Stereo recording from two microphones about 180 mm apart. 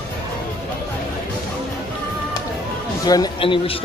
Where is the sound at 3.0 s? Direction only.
20° left (ahead or behind).